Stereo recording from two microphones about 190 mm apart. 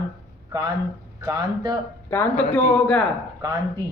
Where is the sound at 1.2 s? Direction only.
20° right (ahead or behind).